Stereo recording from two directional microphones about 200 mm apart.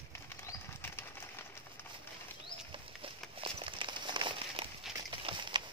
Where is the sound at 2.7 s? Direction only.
25° right (ahead or behind).